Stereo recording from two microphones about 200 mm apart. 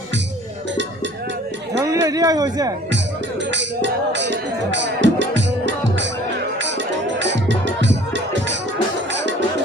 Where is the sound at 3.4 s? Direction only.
65° right (ahead or behind).